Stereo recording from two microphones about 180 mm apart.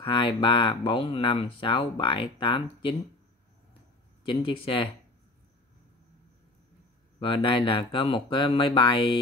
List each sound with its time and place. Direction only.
0.0 s speech: 30° left (ahead or behind)
4.2 s speech: 30° left (ahead or behind)
7.2 s speech: 30° left (ahead or behind)